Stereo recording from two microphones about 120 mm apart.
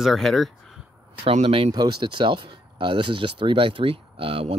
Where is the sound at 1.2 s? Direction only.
55° right (ahead or behind).